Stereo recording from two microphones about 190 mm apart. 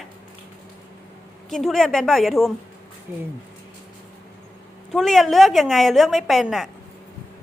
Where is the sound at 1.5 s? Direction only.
Centre (ahead or behind).